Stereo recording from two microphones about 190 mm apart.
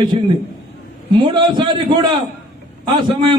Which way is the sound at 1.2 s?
25° right (ahead or behind).